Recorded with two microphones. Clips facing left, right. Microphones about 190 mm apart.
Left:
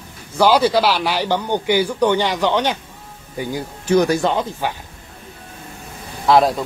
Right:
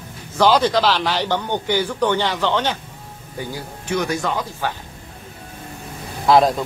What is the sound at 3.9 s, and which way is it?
Speech, 35° left (ahead or behind).